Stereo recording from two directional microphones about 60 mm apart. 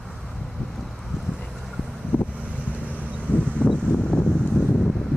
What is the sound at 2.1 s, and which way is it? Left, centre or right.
Boat, left.